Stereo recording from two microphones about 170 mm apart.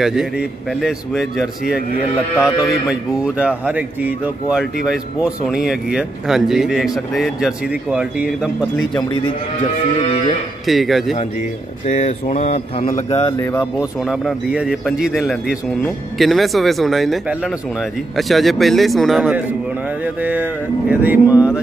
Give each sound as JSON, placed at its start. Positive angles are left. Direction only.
{"t": 0.0, "sound": "speech", "side_deg": -5}
{"t": 2.3, "sound": "speech", "side_deg": 20}
{"t": 2.9, "sound": "speech", "side_deg": -5}
{"t": 9.9, "sound": "speech", "side_deg": 35}
{"t": 10.7, "sound": "speech", "side_deg": 0}
{"t": 11.8, "sound": "speech", "side_deg": 45}
{"t": 13.2, "sound": "speech", "side_deg": 20}
{"t": 14.0, "sound": "speech", "side_deg": -5}